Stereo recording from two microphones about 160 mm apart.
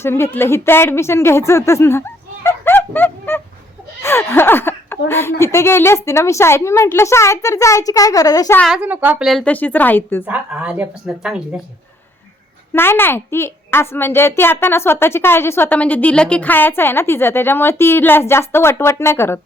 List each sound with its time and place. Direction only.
0.0 s a woman's voice: 15° left (ahead or behind)
4.0 s a sound: 15° left (ahead or behind)
5.4 s a woman's voice: 15° left (ahead or behind)
8.5 s speech: centre (ahead or behind)
8.8 s a woman's voice: 10° right (ahead or behind); by 10.2 s 15° left (ahead or behind)
10.2 s speech: 5° right (ahead or behind)
12.7 s a woman's voice: 15° left (ahead or behind)